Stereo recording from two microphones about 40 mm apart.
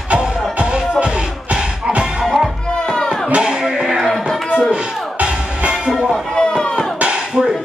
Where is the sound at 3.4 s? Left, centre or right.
Right.